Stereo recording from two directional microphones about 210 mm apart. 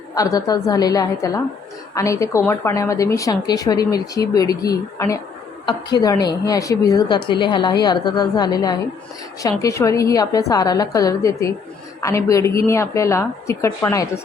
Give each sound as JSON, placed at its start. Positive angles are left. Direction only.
{"t": 0.1, "sound": "a woman's voice", "side_deg": 15}